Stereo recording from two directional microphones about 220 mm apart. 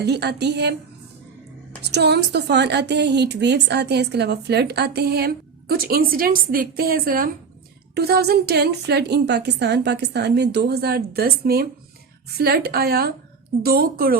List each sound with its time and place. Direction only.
0.0 s a woman's voice: 50° right (ahead or behind)
1.8 s a woman's voice: 50° right (ahead or behind)